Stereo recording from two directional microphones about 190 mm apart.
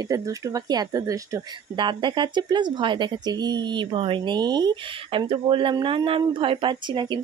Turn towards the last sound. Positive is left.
turn(degrees=-25)  # may be behind; listen again after turning